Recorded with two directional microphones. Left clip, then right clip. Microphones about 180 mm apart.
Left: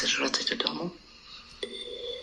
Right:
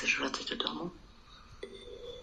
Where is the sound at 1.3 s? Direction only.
35° left (ahead or behind).